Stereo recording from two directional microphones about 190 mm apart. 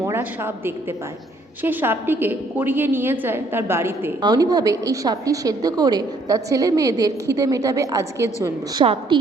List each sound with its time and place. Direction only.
0.0 s a woman's voice: 15° right (ahead or behind)
8.8 s a woman's voice: 30° right (ahead or behind)